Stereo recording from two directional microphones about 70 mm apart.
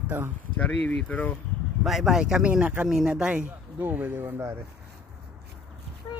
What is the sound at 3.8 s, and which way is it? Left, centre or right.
Speech, right.